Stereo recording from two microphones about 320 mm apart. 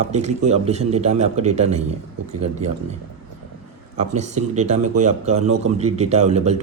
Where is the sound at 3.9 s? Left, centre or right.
Right.